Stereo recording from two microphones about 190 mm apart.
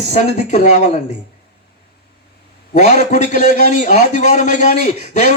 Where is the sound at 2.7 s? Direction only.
40° left (ahead or behind).